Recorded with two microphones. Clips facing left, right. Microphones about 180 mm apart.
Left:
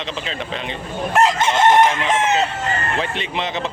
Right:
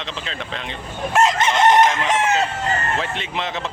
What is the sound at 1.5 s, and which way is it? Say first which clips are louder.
Chicken: even; 25° left (ahead or behind).